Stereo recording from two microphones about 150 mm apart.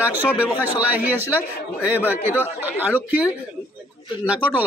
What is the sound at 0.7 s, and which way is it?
A man's voice, 10° right (ahead or behind).